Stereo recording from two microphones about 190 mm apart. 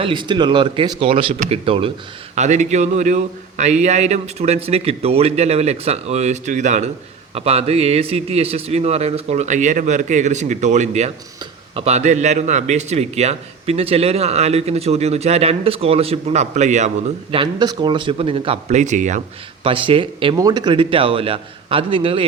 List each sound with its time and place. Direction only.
0.0 s a man's voice: 25° right (ahead or behind)
17.3 s speech: 25° right (ahead or behind); by 19.2 s 40° right (ahead or behind)
19.6 s speech: 30° right (ahead or behind)